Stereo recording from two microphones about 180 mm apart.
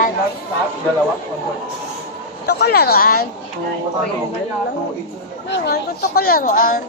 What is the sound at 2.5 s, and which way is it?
Speech, 65° left (ahead or behind).